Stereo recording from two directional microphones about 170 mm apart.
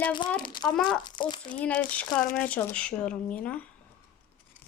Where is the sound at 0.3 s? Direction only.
25° left (ahead or behind).